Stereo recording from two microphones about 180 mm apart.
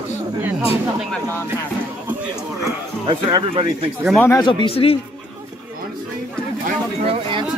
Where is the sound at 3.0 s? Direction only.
30° right (ahead or behind).